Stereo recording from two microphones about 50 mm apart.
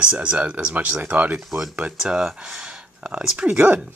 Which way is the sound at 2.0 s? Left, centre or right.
Centre.